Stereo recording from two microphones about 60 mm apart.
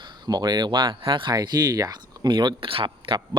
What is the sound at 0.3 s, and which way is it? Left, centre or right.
Speech, right.